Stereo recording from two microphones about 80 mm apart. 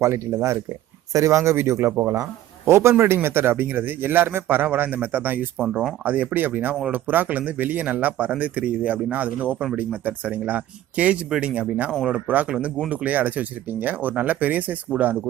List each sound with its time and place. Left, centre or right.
0.0 s speech: right
1.9 s speech: right
2.6 s speech: right; by 15.2 s centre